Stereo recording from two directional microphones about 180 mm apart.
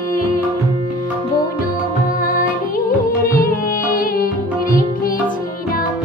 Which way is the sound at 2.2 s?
50° left (ahead or behind).